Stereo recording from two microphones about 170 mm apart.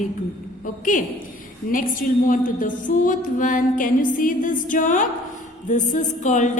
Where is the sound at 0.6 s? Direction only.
50° left (ahead or behind).